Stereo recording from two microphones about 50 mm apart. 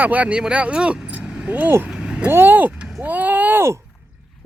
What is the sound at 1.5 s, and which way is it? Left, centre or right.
Speech, right.